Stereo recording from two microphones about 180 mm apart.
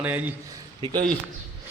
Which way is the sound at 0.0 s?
10° right (ahead or behind).